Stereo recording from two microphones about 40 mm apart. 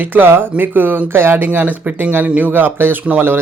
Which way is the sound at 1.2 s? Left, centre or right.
Right.